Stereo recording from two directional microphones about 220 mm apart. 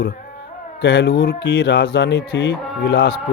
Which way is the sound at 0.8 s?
50° left (ahead or behind).